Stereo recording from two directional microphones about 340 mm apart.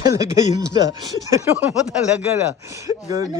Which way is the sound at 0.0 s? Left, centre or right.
Centre.